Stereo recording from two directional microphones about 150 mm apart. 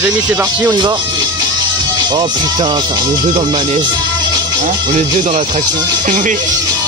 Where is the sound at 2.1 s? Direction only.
30° right (ahead or behind).